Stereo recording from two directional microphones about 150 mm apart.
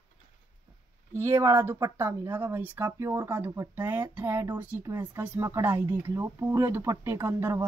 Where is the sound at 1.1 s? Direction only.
15° right (ahead or behind).